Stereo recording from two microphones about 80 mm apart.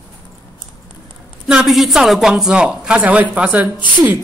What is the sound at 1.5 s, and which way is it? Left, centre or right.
Speech, centre.